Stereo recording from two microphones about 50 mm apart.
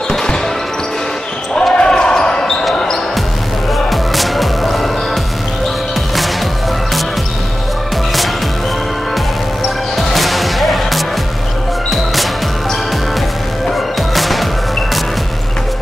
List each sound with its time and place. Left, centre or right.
1.5 s basketball bounce: centre
3.9 s music: centre
9.9 s music: centre
13.7 s music: centre